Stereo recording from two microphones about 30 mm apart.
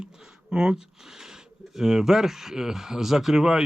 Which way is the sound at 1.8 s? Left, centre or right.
Centre.